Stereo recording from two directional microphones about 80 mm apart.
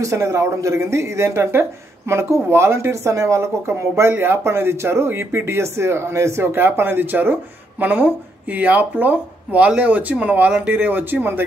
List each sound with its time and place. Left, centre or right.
0.0 s speech: right